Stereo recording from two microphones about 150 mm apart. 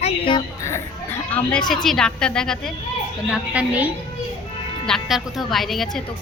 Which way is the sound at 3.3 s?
10° right (ahead or behind).